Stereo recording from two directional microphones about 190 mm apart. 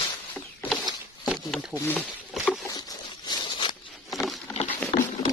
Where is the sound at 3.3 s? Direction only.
25° left (ahead or behind).